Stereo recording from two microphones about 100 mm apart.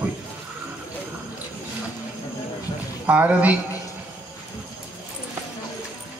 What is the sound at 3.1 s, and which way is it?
Speech, 15° right (ahead or behind).